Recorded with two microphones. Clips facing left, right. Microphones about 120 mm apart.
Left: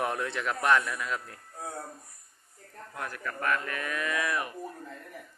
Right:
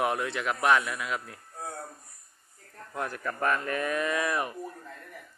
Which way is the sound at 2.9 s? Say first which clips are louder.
Right 4 dB; 30° right (ahead or behind).